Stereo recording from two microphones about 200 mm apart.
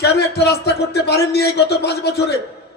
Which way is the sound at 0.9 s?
55° left (ahead or behind).